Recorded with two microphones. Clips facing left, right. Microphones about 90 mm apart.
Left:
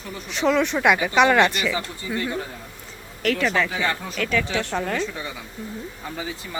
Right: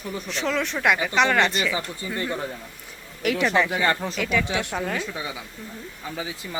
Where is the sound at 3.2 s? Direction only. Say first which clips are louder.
Even; 15° right (ahead or behind).